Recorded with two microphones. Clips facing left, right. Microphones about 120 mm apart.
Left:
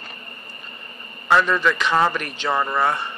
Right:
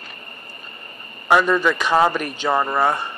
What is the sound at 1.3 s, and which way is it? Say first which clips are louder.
A man's voice: right 2 dB; 15° right (ahead or behind).